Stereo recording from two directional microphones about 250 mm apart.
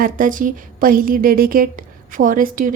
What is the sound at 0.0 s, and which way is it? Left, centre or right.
A woman's voice, right.